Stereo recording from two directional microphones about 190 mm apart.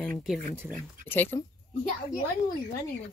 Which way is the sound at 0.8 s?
10° left (ahead or behind).